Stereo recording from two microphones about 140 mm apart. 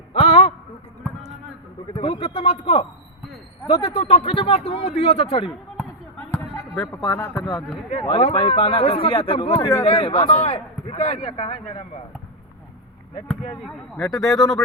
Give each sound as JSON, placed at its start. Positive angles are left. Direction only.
{"t": 0.1, "sound": "a sound", "side_deg": 50}
{"t": 2.0, "sound": "a man's voice", "side_deg": 45}
{"t": 6.1, "sound": "a sound", "side_deg": 10}
{"t": 6.7, "sound": "speech", "side_deg": 20}
{"t": 8.0, "sound": "speech", "side_deg": 40}
{"t": 9.6, "sound": "speech", "side_deg": 20}
{"t": 9.8, "sound": "a man's voice", "side_deg": 40}
{"t": 13.1, "sound": "a man's voice", "side_deg": 55}
{"t": 13.9, "sound": "speech", "side_deg": 5}